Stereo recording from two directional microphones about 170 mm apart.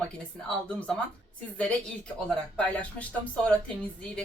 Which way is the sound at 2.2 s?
5° left (ahead or behind).